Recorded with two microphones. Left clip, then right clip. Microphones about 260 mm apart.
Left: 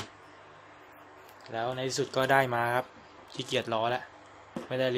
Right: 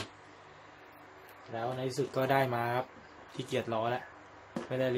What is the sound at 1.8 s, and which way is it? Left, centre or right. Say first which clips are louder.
Speech: left 3 dB; left.